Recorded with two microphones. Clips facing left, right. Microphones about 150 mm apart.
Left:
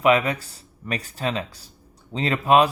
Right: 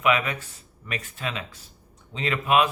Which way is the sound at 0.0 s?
35° left (ahead or behind).